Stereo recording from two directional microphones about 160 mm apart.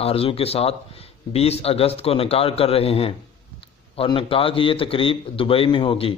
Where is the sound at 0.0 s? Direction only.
35° left (ahead or behind).